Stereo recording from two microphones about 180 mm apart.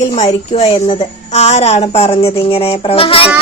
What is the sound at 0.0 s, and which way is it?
A woman's voice, 35° left (ahead or behind).